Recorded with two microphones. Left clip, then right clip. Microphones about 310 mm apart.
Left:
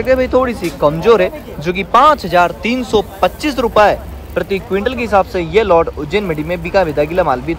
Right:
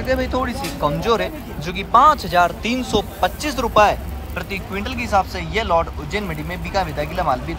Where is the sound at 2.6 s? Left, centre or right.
Centre.